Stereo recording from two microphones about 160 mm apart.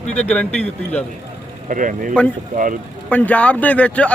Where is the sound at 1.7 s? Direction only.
55° right (ahead or behind).